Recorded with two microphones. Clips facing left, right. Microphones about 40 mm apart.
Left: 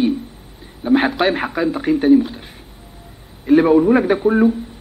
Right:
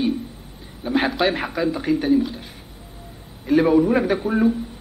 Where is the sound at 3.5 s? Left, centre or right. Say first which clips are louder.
Left 4 dB; centre.